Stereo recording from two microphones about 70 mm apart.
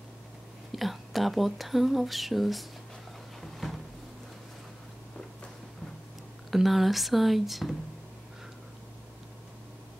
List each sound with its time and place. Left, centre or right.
0.7 s speech: centre
3.5 s a sound: centre
6.5 s speech: centre